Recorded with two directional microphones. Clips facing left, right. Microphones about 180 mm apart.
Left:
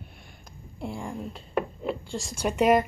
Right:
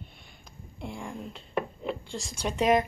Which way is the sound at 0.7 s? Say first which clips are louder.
Left 4 dB; 35° left (ahead or behind).